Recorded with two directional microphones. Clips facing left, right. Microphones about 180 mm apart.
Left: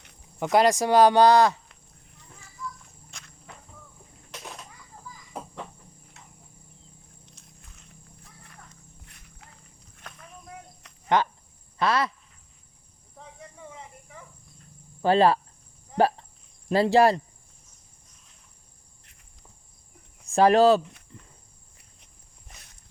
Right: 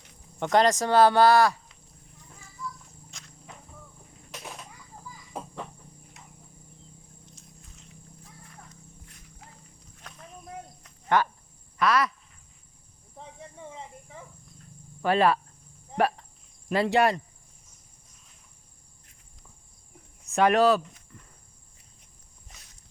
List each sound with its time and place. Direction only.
0.3 s speech: 5° left (ahead or behind)
3.1 s walk: 60° left (ahead or behind)
5.3 s cricket: centre (ahead or behind)
6.2 s cricket: 15° right (ahead or behind)
7.4 s wild animals: 65° left (ahead or behind)
10.0 s a sound: 55° left (ahead or behind)
10.8 s cricket: 80° left
11.8 s a sound: 30° left (ahead or behind)
15.0 s speech: 30° left (ahead or behind)
16.0 s cricket: 30° left (ahead or behind)
16.6 s speech: 30° left (ahead or behind)
20.2 s speech: 30° left (ahead or behind)
21.1 s insect: 25° left (ahead or behind)
22.4 s a sound: 60° left (ahead or behind)